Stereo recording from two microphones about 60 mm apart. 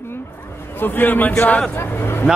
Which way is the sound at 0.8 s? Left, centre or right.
Left.